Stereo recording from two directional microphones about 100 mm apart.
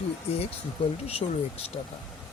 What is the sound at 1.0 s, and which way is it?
Speech, 90° left.